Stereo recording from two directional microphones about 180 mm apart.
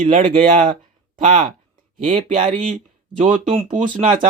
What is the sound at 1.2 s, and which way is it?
Speech, 40° right (ahead or behind).